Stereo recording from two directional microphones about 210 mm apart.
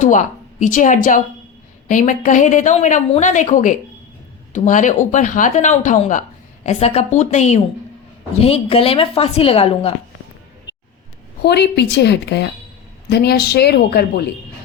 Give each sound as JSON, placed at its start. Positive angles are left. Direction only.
{"t": 0.0, "sound": "a woman's voice", "side_deg": 35}
{"t": 11.4, "sound": "a woman's voice", "side_deg": 50}